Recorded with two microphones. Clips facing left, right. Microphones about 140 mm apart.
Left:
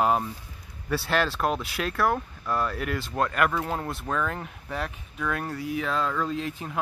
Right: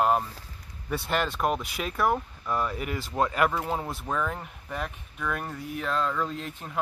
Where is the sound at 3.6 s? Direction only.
Centre (ahead or behind).